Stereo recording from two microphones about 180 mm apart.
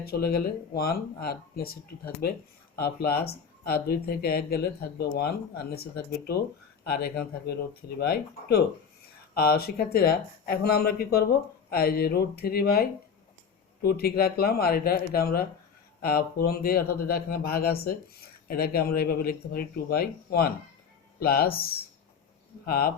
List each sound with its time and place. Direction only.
0.0 s speech: 60° left (ahead or behind)
22.6 s speech: 60° left (ahead or behind)